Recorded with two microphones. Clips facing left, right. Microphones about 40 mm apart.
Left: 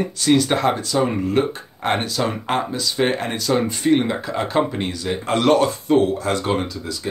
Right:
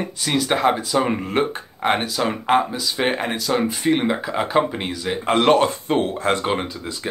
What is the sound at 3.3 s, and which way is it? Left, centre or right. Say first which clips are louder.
Speech: left 1 dB; centre.